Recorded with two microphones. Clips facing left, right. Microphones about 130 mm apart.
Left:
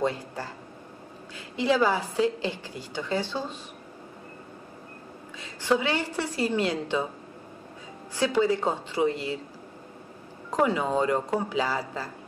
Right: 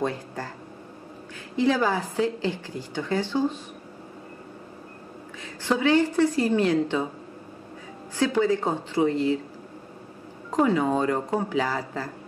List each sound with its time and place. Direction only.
0.0 s a woman's voice: 15° left (ahead or behind)
1.6 s a woman's voice: 15° left (ahead or behind)
5.7 s a woman's voice: 15° left (ahead or behind)
8.2 s a woman's voice: 15° left (ahead or behind)
10.6 s a woman's voice: 15° left (ahead or behind)